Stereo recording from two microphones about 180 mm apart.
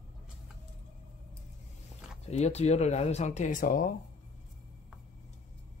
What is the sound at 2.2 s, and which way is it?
Speech, 40° left (ahead or behind).